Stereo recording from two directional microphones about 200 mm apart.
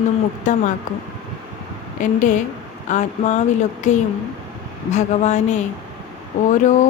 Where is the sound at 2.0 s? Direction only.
40° left (ahead or behind).